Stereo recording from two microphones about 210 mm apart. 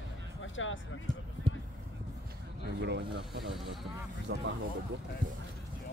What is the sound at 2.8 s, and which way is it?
Speech, 55° right (ahead or behind).